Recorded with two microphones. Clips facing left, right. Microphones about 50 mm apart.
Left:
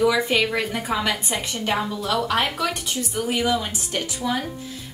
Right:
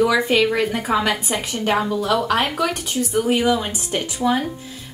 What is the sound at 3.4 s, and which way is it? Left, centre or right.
A woman's voice, centre.